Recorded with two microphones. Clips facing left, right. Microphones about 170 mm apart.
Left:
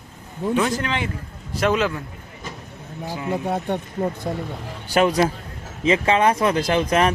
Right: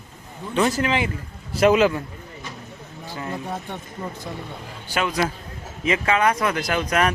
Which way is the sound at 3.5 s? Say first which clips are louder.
Left 7 dB; 60° left (ahead or behind).